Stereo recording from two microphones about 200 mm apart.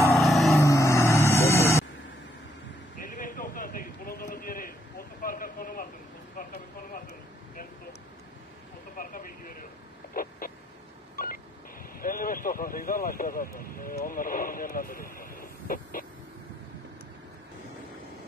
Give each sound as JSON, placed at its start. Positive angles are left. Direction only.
{"t": 0.1, "sound": "vehicle", "side_deg": 0}
{"t": 0.6, "sound": "vehicle", "side_deg": 15}
{"t": 3.0, "sound": "a sound", "side_deg": 40}
{"t": 6.3, "sound": "vehicle", "side_deg": 45}
{"t": 8.9, "sound": "vehicle", "side_deg": 45}
{"t": 10.1, "sound": "a sound", "side_deg": 45}
{"t": 11.2, "sound": "telephone dialing", "side_deg": 45}
{"t": 12.0, "sound": "vehicle", "side_deg": 45}